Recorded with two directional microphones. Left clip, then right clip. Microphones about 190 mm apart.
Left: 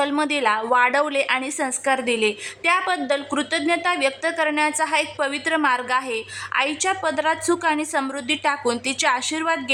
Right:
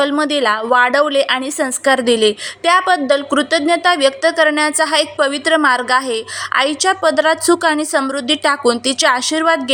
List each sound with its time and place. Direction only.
0.0 s a woman's voice: 15° right (ahead or behind)